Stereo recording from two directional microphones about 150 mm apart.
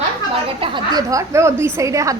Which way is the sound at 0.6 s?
35° right (ahead or behind).